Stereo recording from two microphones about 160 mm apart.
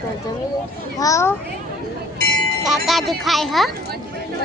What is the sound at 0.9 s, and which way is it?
Speech, 20° left (ahead or behind).